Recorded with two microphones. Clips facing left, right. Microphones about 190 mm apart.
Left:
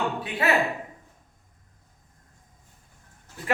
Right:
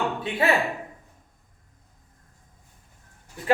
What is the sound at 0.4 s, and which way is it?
Speech, 25° right (ahead or behind).